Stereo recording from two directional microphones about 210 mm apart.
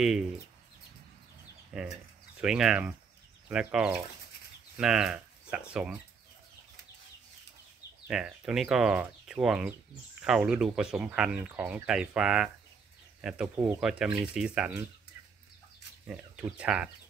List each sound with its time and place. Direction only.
1.7 s speech: 5° right (ahead or behind)
8.1 s speech: 5° right (ahead or behind)
16.1 s speech: 5° right (ahead or behind)